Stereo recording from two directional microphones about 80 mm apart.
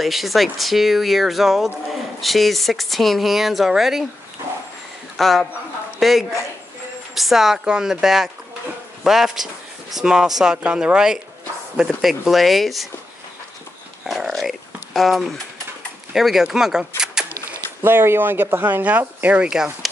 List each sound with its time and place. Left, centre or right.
0.0 s speech: centre
5.1 s speech: centre
14.0 s dog: centre
16.1 s speech: centre
17.0 s a sound: centre
17.3 s a sound: left
17.8 s speech: right; by 19.9 s centre